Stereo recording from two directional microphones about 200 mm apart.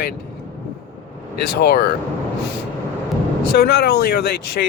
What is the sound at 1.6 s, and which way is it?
Speech, 45° left (ahead or behind).